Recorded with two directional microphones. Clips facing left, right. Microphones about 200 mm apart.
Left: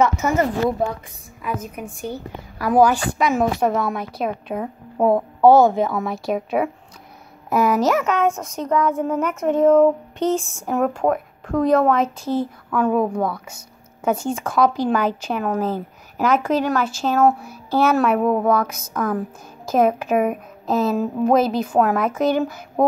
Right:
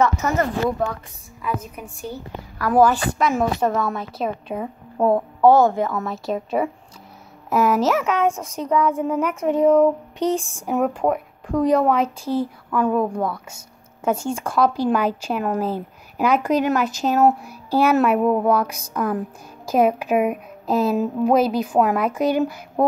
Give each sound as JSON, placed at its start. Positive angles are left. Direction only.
{"t": 0.0, "sound": "a woman's voice", "side_deg": 20}
{"t": 7.4, "sound": "music", "side_deg": -5}
{"t": 10.7, "sound": "a woman's voice", "side_deg": 0}
{"t": 14.8, "sound": "music", "side_deg": -5}